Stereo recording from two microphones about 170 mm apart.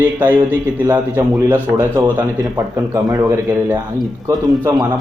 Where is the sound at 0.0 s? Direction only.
10° right (ahead or behind).